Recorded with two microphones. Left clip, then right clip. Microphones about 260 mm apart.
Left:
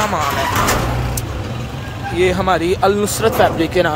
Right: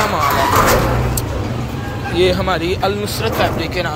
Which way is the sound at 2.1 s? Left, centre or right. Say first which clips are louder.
Even; centre.